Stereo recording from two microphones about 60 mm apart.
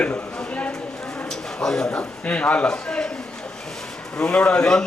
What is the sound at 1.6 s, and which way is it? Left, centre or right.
Speech, centre.